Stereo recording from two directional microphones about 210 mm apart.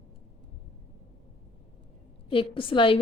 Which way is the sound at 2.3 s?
25° left (ahead or behind).